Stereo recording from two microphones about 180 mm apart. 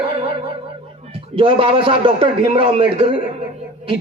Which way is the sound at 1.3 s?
30° right (ahead or behind).